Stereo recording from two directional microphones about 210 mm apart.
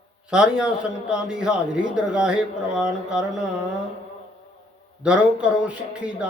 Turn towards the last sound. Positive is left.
turn(degrees=-5)  # may be behind; listen again after turning